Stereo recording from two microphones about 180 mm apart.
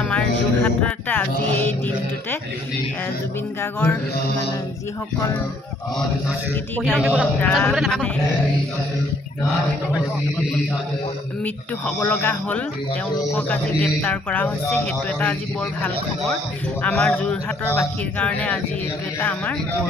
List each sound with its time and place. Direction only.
0.1 s speech: 5° left (ahead or behind)
6.8 s a man's voice: 5° right (ahead or behind)
7.3 s a man's voice: 5° left (ahead or behind)
12.0 s speech: 10° left (ahead or behind)
16.8 s speech: 5° left (ahead or behind)